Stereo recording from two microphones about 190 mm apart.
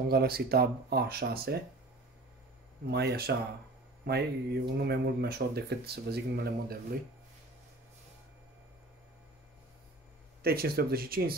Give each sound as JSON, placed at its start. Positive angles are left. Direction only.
{"t": 0.1, "sound": "speech", "side_deg": -55}
{"t": 2.9, "sound": "speech", "side_deg": -60}
{"t": 10.4, "sound": "speech", "side_deg": -55}